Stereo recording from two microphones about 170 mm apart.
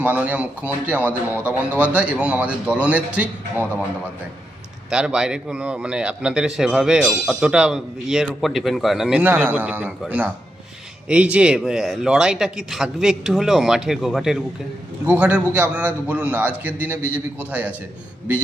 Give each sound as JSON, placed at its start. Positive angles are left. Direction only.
{"t": 0.0, "sound": "speech", "side_deg": -10}
{"t": 4.9, "sound": "a man's voice", "side_deg": -5}